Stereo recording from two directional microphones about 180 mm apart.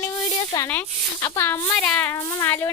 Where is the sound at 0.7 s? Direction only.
10° left (ahead or behind).